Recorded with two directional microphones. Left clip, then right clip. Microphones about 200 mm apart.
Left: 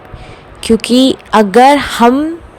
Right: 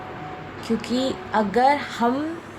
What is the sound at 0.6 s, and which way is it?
A woman's voice, 55° left (ahead or behind).